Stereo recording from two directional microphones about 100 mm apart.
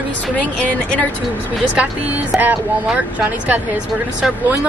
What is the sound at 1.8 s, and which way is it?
Speech, 15° right (ahead or behind).